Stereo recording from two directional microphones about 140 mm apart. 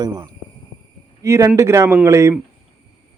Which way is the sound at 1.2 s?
20° right (ahead or behind).